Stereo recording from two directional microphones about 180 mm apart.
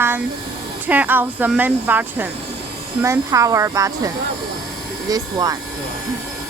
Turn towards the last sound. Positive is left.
turn(degrees=-20)  # may be behind; listen again after turning